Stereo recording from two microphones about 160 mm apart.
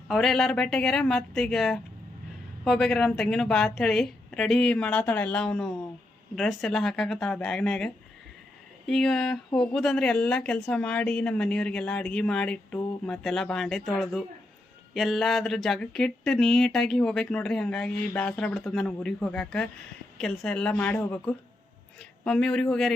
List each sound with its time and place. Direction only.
0.1 s speech: centre (ahead or behind)
8.9 s a woman's voice: 5° left (ahead or behind)